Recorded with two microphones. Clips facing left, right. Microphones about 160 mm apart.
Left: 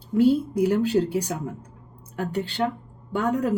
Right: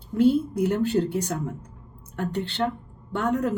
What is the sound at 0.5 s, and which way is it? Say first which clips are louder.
Speech: left 2 dB; 5° left (ahead or behind).